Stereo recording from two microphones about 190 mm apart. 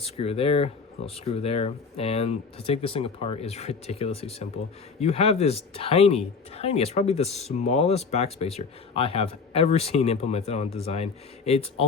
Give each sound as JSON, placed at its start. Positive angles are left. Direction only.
{"t": 0.0, "sound": "speech", "side_deg": 30}